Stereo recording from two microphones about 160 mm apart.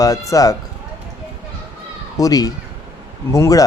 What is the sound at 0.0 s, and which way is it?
Speech, 20° left (ahead or behind).